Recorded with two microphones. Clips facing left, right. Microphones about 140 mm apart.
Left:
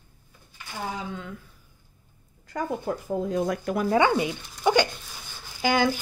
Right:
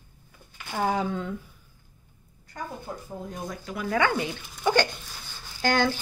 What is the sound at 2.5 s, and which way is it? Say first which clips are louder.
Speech: left 8 dB; 90° left.